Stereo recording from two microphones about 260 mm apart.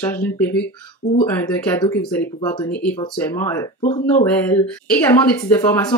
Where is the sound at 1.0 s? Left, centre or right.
Left.